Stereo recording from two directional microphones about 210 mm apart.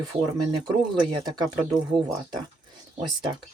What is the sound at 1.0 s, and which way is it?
Speech, 20° right (ahead or behind).